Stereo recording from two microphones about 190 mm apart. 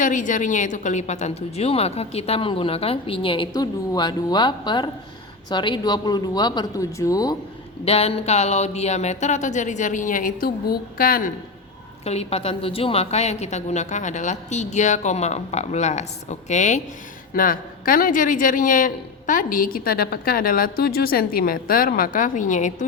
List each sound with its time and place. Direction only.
0.0 s a woman's voice: 45° left (ahead or behind); by 7.3 s 20° left (ahead or behind)
7.9 s a woman's voice: 30° left (ahead or behind); by 11.3 s 50° left (ahead or behind)
12.0 s a woman's voice: 35° left (ahead or behind)